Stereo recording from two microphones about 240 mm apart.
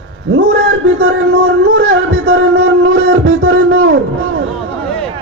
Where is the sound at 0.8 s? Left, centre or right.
Right.